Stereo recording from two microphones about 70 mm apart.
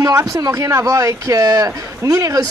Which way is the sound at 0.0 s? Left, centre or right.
Right.